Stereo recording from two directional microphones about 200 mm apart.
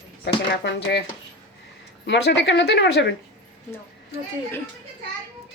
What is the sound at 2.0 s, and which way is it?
Speech, 60° left (ahead or behind).